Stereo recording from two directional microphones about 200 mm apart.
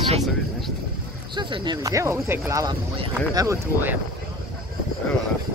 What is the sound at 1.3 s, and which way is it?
Speech, 25° right (ahead or behind).